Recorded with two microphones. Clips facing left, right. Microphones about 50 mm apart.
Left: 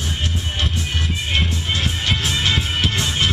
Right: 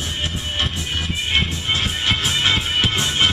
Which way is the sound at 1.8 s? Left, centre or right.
Centre.